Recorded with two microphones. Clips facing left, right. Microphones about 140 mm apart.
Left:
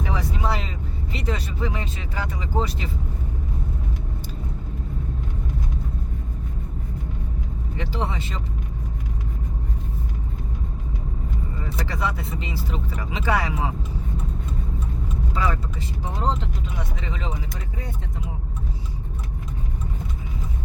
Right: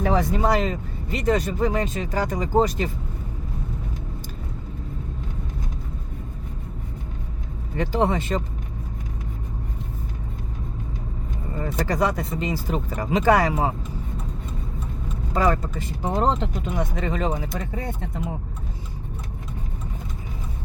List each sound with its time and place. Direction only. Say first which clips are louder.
0.0 s vehicle: right 6 dB; 45° right (ahead or behind)
7.8 s speech: right 7 dB; 45° right (ahead or behind)
11.5 s speech: right 9 dB; 45° right (ahead or behind)
15.3 s speech: right 6 dB; 45° right (ahead or behind)